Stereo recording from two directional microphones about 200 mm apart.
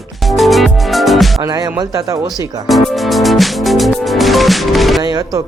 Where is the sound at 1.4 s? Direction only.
20° right (ahead or behind).